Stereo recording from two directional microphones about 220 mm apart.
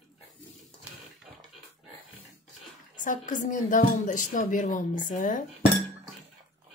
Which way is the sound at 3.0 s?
35° left (ahead or behind).